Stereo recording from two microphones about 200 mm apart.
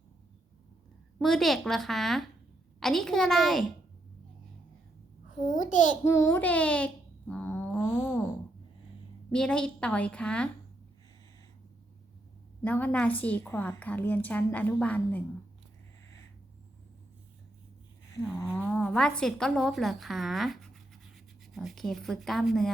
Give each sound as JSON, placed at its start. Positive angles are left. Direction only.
{"t": 1.2, "sound": "a woman's voice", "side_deg": 0}
{"t": 5.5, "sound": "a child's voice", "side_deg": 75}
{"t": 6.1, "sound": "a child's voice", "side_deg": 15}
{"t": 9.3, "sound": "a woman's voice", "side_deg": 5}
{"t": 12.6, "sound": "a woman's voice", "side_deg": 10}
{"t": 18.7, "sound": "a woman's voice", "side_deg": 5}